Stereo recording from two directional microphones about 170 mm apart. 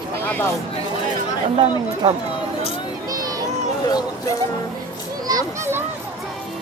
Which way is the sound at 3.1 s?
20° right (ahead or behind).